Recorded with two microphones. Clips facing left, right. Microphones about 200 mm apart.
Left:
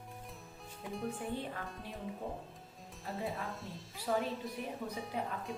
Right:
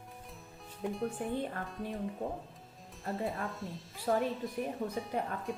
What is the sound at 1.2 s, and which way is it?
Speech, 55° right (ahead or behind).